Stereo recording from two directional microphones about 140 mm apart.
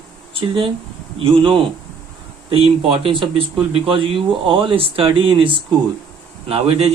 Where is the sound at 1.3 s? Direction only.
40° right (ahead or behind).